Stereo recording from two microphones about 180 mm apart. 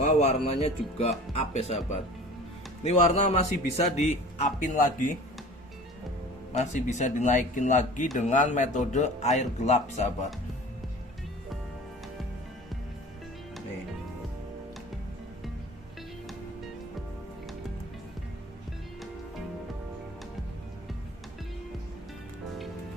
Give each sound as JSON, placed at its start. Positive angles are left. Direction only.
{"t": 0.2, "sound": "speech", "side_deg": 35}
{"t": 2.8, "sound": "speech", "side_deg": 40}
{"t": 6.5, "sound": "speech", "side_deg": 40}